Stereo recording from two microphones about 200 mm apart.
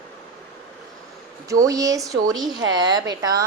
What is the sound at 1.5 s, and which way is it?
A woman's voice, 15° right (ahead or behind).